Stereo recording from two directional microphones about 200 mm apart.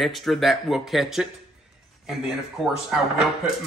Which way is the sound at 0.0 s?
Centre (ahead or behind).